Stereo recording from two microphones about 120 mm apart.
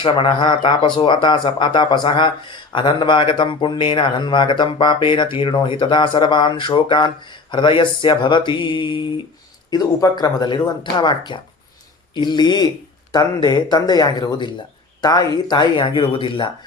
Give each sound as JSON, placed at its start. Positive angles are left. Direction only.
{"t": 0.0, "sound": "speech", "side_deg": 45}